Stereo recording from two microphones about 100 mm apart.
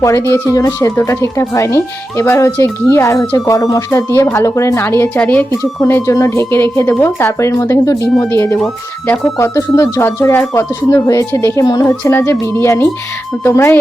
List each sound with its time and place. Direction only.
0.0 s speech: 30° left (ahead or behind)
5.8 s speech: 30° left (ahead or behind)
11.6 s speech: 40° left (ahead or behind)
12.0 s speech: 30° left (ahead or behind)